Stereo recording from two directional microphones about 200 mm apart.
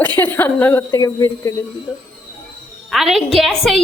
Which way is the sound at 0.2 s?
10° left (ahead or behind).